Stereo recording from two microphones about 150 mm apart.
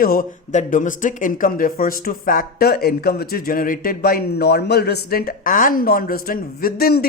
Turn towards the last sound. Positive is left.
turn(degrees=90)